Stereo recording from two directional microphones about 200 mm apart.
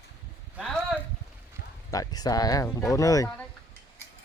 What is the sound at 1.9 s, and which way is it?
Speech, 20° left (ahead or behind).